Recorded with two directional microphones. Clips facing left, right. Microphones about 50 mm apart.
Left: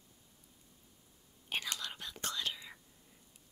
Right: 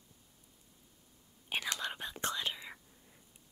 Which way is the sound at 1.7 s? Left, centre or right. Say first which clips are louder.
Right 5 dB; right.